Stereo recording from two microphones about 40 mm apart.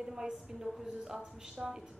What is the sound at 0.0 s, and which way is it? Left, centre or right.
A woman's voice, centre.